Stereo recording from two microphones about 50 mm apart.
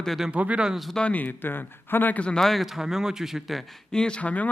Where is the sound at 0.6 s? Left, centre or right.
Centre.